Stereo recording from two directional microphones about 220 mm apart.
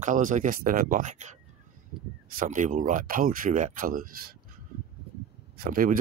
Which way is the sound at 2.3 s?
35° right (ahead or behind).